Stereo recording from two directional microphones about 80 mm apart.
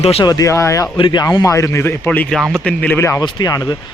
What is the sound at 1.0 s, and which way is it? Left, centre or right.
Speech, left.